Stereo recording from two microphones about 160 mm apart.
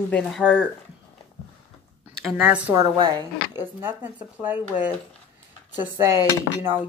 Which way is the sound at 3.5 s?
15° right (ahead or behind).